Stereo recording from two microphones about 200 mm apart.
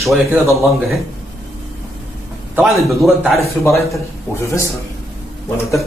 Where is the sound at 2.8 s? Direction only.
Centre (ahead or behind).